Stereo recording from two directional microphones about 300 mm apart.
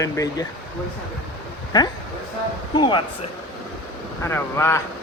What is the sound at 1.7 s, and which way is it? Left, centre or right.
A man's voice, centre.